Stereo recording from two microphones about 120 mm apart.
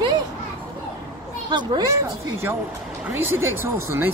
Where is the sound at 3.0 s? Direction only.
20° right (ahead or behind).